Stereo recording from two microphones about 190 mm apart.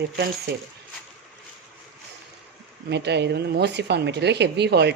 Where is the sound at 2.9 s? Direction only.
65° right (ahead or behind).